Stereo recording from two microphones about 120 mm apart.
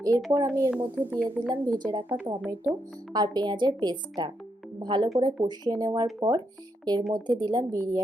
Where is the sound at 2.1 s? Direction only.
30° right (ahead or behind).